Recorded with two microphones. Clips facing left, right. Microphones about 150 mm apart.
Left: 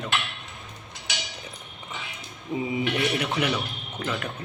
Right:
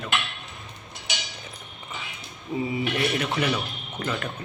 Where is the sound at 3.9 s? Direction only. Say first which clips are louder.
Right 1 dB; 5° left (ahead or behind).